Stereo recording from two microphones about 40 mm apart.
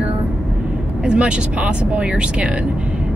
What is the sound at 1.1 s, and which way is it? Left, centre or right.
Speech, right.